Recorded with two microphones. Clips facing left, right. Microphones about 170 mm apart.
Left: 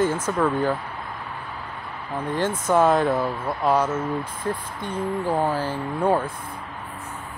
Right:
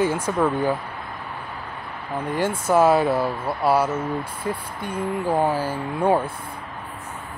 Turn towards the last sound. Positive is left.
turn(degrees=-10)  # may be behind; listen again after turning